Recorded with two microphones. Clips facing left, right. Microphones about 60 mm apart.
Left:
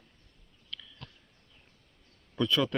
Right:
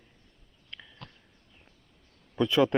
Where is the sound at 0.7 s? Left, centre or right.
Right.